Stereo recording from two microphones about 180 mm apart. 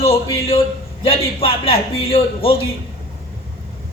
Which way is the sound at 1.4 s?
30° left (ahead or behind).